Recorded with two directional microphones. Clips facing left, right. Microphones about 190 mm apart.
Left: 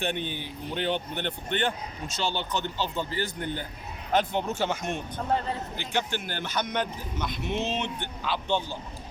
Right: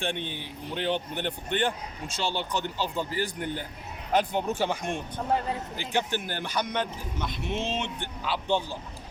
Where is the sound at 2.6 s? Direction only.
5° right (ahead or behind).